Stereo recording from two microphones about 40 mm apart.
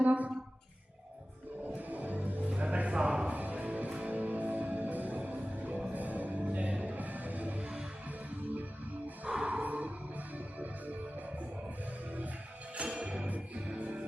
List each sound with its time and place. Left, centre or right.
0.0 s music: right
1.6 s music: right
2.6 s music: right
3.2 s music: right
9.3 s music: right
9.6 s music: right
13.0 s music: right